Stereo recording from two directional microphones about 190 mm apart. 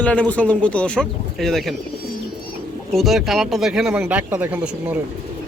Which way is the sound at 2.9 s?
Centre (ahead or behind).